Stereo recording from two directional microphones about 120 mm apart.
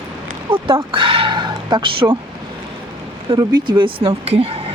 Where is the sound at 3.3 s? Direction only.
35° right (ahead or behind).